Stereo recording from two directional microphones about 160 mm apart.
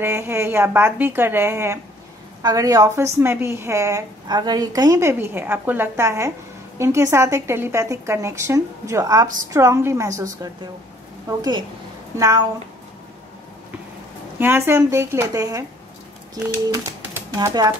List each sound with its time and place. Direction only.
0.0 s a woman's voice: 15° right (ahead or behind)
14.4 s a woman's voice: 15° right (ahead or behind)
17.4 s a woman's voice: 20° right (ahead or behind)